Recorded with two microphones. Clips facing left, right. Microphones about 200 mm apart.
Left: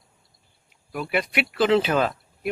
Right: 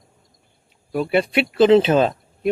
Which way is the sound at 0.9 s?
30° right (ahead or behind).